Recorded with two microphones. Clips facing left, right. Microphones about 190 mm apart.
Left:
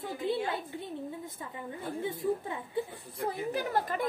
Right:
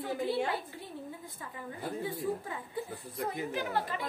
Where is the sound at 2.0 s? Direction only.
20° left (ahead or behind).